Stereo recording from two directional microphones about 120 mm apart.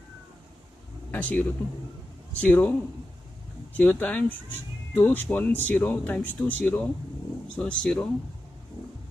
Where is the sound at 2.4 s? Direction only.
15° left (ahead or behind).